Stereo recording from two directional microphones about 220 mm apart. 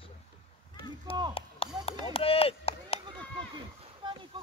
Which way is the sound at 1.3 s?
25° left (ahead or behind).